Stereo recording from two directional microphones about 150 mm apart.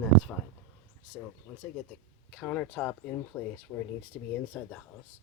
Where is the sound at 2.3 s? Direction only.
10° left (ahead or behind).